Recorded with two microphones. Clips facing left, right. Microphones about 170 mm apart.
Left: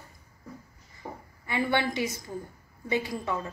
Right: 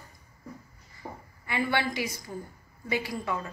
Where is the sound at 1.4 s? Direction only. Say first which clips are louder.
Left 1 dB; 20° left (ahead or behind).